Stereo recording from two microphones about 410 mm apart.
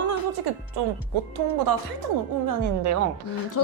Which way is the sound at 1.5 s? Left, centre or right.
Right.